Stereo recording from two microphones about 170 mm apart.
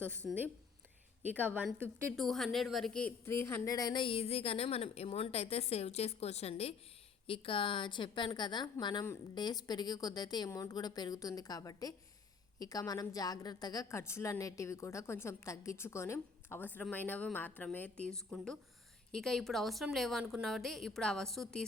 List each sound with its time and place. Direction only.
0.3 s a woman's voice: 10° right (ahead or behind)
2.1 s a woman's voice: centre (ahead or behind)